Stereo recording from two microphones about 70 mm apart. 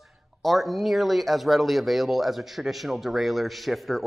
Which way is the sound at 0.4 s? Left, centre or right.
Centre.